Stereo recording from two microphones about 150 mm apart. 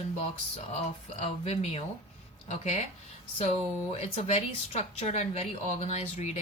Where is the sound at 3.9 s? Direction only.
45° left (ahead or behind).